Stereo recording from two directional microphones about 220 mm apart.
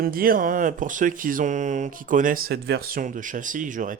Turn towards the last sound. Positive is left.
turn(degrees=-35)  # may be behind; listen again after turning